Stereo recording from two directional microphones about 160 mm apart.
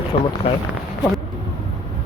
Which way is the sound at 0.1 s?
35° left (ahead or behind).